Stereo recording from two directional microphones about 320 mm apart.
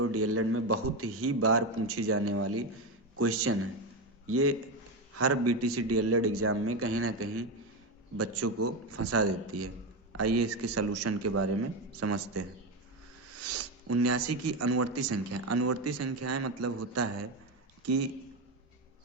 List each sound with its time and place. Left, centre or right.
0.0 s speech: right
13.5 s speech: right